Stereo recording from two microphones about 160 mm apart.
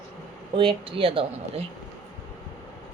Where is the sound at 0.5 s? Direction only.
35° right (ahead or behind).